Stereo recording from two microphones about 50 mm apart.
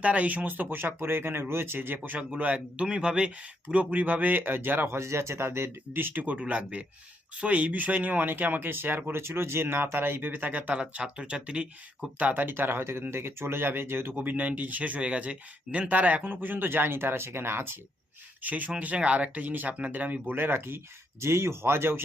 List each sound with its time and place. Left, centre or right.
0.0 s speech: right
2.1 s speech: right
4.9 s speech: right
6.2 s speech: right
10.8 s speech: right
12.3 s speech: right
14.2 s speech: right
16.2 s speech: right
18.4 s speech: right